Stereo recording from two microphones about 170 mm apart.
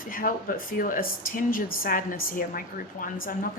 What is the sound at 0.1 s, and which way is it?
A woman's voice, 55° left (ahead or behind).